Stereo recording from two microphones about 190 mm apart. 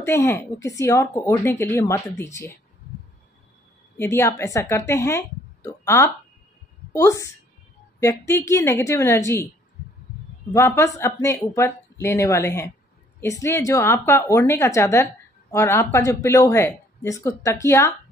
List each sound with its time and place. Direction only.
0.0 s speech: 15° left (ahead or behind)
4.0 s a woman's voice: 10° left (ahead or behind)
10.5 s speech: 15° left (ahead or behind)